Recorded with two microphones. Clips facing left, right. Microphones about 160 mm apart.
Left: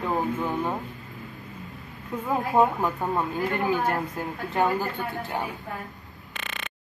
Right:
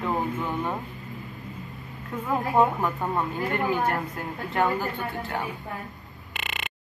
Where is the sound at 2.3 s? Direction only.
15° left (ahead or behind).